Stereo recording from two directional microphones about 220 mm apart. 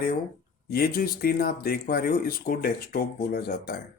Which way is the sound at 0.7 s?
40° left (ahead or behind).